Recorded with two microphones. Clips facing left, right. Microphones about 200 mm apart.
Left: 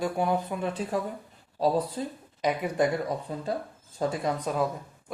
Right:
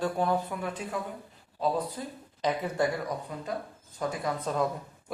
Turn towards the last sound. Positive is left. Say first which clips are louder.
# left 1 dB
turn(degrees=10)  # may be behind; listen again after turning